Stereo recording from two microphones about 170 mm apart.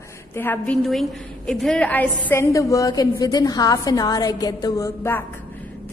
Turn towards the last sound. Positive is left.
turn(degrees=15)  # may be behind; listen again after turning